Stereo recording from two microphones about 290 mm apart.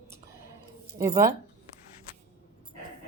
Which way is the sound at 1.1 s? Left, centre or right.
Right.